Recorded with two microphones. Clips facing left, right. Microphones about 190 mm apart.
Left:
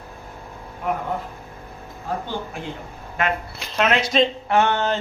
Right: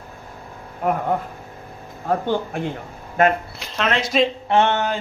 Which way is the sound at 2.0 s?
55° right (ahead or behind).